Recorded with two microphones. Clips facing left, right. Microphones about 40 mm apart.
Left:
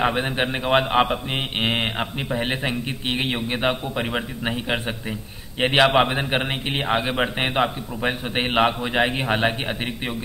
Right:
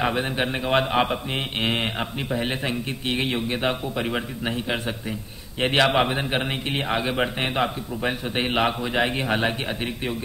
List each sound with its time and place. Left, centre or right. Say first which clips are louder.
0.0 s a man's voice: left 2 dB; centre